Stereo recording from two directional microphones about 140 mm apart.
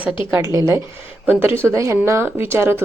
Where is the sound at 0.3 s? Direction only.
20° right (ahead or behind).